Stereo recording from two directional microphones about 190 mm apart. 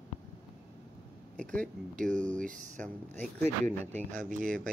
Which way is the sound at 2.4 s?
40° right (ahead or behind).